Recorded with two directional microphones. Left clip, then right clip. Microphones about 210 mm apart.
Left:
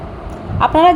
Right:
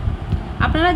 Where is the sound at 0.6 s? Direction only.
10° left (ahead or behind).